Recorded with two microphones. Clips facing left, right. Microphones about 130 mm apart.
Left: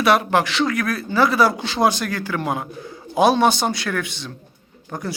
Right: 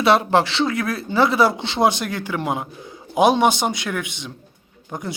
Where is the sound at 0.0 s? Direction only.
25° right (ahead or behind).